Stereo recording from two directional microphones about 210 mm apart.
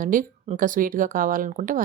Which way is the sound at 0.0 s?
40° right (ahead or behind).